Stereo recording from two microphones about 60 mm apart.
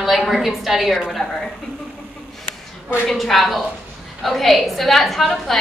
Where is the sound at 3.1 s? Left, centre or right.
Centre.